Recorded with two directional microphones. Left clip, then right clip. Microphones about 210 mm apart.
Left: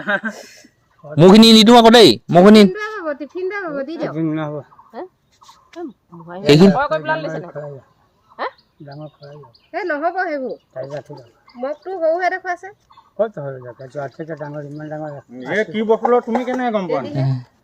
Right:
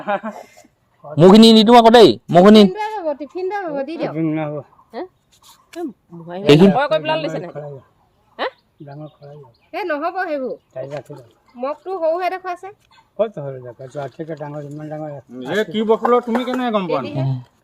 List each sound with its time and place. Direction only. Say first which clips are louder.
0.0 s speech: left 2 dB; 45° left (ahead or behind)
1.1 s a man's voice: even; 10° left (ahead or behind)
2.3 s speech: left 1 dB; 10° left (ahead or behind)
2.7 s a sound: right 2 dB; 20° left (ahead or behind)
3.3 s speech: right 1 dB; 5° left (ahead or behind)
5.7 s speech: right 3 dB; 55° right (ahead or behind)
6.4 s speech: even; 10° left (ahead or behind)
6.7 s speech: right 1 dB; 55° right (ahead or behind)
8.9 s speech: left 1 dB; 15° right (ahead or behind)
15.5 s speech: even; 25° right (ahead or behind)
17.2 s speech: left 1 dB; 10° left (ahead or behind)